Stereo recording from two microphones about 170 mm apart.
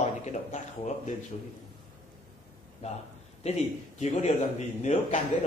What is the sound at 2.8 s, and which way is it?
A man's voice, 40° left (ahead or behind).